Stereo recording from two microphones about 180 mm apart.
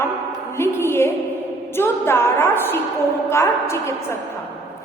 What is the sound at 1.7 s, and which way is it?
A woman's voice, 15° left (ahead or behind).